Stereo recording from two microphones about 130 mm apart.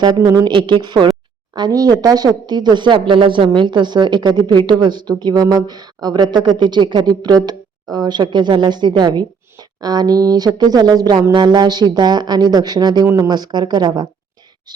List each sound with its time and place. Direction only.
0.0 s speech: 30° right (ahead or behind)